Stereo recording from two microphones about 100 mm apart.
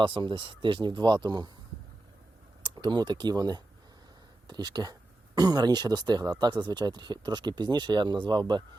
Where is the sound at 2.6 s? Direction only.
50° right (ahead or behind).